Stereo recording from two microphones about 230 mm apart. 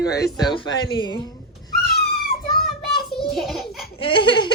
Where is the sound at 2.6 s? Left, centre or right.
Centre.